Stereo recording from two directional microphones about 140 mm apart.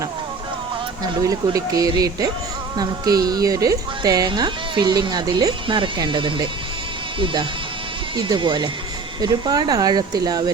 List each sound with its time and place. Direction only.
1.2 s speech: 25° right (ahead or behind)
8.1 s speech: 35° right (ahead or behind)